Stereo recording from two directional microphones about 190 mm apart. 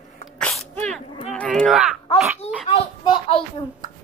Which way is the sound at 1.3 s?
5° left (ahead or behind).